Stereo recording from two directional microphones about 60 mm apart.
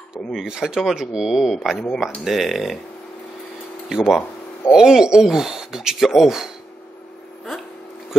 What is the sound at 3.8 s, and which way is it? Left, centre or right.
Speech, centre.